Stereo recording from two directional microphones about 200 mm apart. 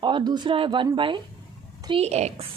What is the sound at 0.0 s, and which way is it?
A woman's voice, 25° right (ahead or behind).